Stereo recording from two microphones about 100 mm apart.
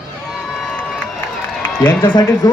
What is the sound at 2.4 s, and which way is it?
Speech, 35° left (ahead or behind).